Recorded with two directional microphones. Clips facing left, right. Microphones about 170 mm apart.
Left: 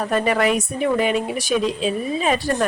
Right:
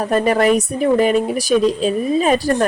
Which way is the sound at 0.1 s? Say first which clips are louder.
Right 5 dB; 40° right (ahead or behind).